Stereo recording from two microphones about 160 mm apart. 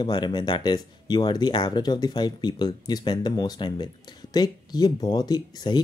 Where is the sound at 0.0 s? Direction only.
30° left (ahead or behind).